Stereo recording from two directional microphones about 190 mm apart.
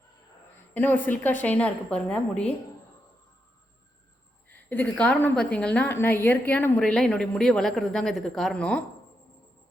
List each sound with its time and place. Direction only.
0.7 s a woman's voice: 10° left (ahead or behind)
4.4 s a woman's voice: 10° left (ahead or behind)